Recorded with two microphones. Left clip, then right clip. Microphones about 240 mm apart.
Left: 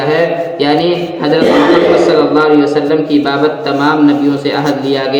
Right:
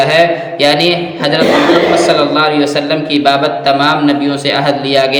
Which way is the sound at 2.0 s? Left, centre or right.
Right.